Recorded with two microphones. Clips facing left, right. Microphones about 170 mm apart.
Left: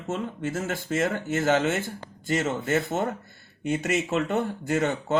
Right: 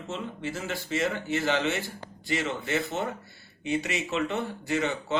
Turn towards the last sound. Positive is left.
turn(degrees=45)  # may be behind; listen again after turning